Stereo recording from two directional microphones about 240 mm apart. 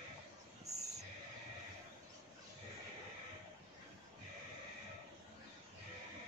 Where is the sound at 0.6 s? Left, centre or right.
Right.